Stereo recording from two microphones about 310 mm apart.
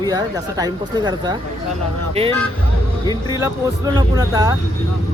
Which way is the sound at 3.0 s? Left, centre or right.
Centre.